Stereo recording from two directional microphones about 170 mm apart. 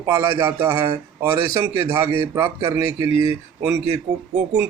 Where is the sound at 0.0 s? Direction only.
20° right (ahead or behind).